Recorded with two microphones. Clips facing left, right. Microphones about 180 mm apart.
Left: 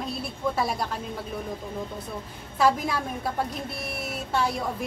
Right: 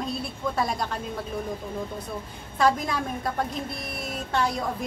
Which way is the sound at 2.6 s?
5° left (ahead or behind).